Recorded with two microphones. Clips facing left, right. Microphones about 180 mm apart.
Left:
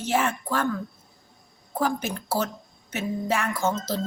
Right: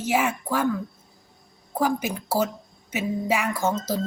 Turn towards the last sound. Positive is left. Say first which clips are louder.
# right 1 dB
turn(degrees=-15)  # may be behind; listen again after turning